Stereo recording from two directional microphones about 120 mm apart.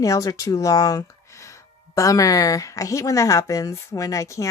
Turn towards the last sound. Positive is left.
turn(degrees=25)  # may be behind; listen again after turning